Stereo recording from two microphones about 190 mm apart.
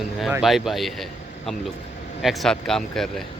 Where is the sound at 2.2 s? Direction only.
Centre (ahead or behind).